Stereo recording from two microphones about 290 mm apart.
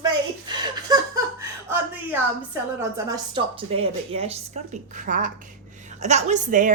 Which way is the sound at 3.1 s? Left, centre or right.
Centre.